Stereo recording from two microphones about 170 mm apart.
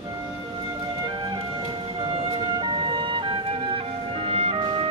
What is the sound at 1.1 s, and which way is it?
Music, 25° right (ahead or behind).